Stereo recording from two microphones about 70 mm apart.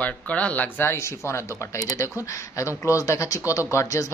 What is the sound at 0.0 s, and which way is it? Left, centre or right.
Speech, centre.